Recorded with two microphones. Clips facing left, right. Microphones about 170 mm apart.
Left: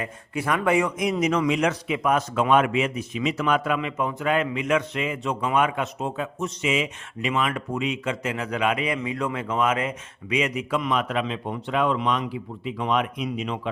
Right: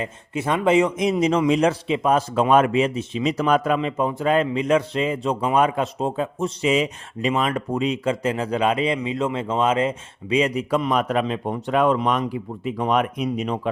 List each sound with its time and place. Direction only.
0.0 s a man's voice: 25° right (ahead or behind); by 13.6 s 40° right (ahead or behind)